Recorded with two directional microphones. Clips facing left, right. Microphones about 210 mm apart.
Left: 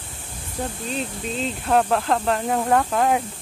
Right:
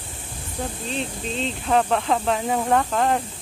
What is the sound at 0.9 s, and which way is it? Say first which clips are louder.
Speech: even; 5° left (ahead or behind).